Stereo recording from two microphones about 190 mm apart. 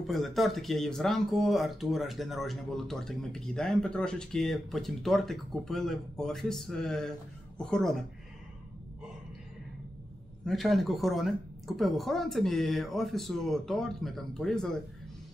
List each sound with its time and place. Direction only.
0.0 s speech: centre (ahead or behind)
10.4 s speech: centre (ahead or behind)